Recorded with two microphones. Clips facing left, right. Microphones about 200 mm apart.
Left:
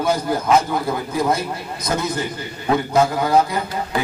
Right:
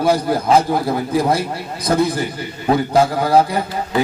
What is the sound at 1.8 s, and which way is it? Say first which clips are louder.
A man's voice: right 6 dB; 30° right (ahead or behind).